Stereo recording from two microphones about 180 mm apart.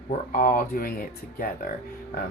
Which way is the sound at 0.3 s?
45° left (ahead or behind).